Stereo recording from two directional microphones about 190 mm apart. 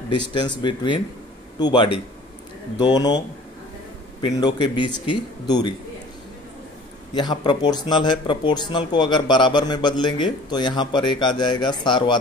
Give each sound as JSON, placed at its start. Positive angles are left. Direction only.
{"t": 0.1, "sound": "speech", "side_deg": 25}
{"t": 4.2, "sound": "speech", "side_deg": 20}
{"t": 7.2, "sound": "speech", "side_deg": 25}